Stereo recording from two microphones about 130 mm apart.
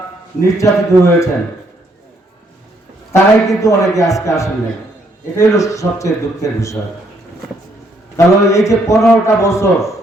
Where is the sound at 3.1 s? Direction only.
25° left (ahead or behind).